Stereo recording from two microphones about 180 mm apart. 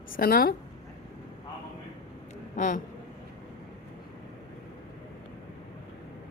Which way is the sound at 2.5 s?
45° left (ahead or behind).